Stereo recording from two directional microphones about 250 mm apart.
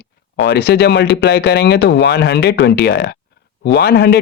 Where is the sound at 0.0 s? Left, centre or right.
Left.